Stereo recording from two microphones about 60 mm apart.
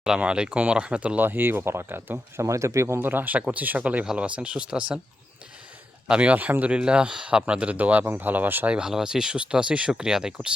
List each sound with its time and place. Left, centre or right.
0.2 s speech: centre; by 2.4 s right
2.4 s speech: right
3.0 s speech: right
6.1 s speech: right
8.7 s speech: centre